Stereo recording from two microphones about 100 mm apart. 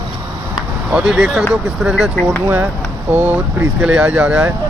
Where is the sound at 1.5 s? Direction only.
5° right (ahead or behind).